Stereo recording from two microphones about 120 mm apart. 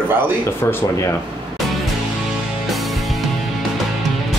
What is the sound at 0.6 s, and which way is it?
Speech, 20° left (ahead or behind).